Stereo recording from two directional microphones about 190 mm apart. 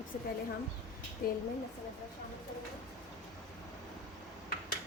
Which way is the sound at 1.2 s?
50° left (ahead or behind).